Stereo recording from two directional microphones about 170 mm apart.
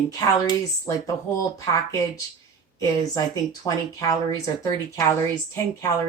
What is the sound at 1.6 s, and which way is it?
Speech, 20° left (ahead or behind).